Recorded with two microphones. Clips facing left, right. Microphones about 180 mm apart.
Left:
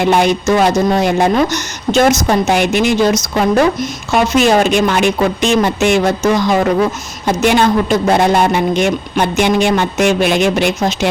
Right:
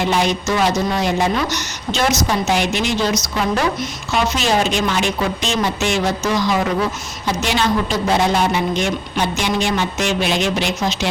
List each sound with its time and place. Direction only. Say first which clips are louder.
0.0 s a woman's voice: left 6 dB; 55° left (ahead or behind)